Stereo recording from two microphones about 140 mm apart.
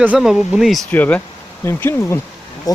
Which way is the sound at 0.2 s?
5° right (ahead or behind).